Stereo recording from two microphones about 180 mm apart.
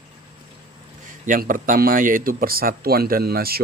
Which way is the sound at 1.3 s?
50° right (ahead or behind).